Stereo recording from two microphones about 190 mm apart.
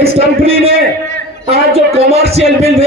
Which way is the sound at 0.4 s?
30° right (ahead or behind).